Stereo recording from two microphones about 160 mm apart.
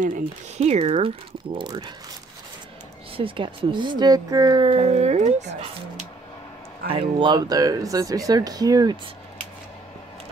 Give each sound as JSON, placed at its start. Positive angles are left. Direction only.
{"t": 0.0, "sound": "speech", "side_deg": -50}
{"t": 3.2, "sound": "speech", "side_deg": -30}
{"t": 6.9, "sound": "speech", "side_deg": -35}